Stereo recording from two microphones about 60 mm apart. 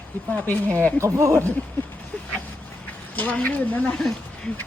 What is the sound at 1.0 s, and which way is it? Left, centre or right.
Speech, right.